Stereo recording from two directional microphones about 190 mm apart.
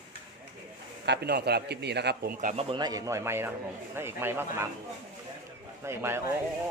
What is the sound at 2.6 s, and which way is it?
Speech, 20° right (ahead or behind).